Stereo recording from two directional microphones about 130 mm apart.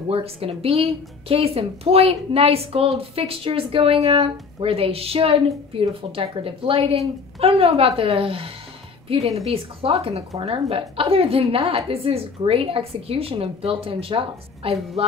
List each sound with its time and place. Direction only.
0.1 s speech: 50° right (ahead or behind)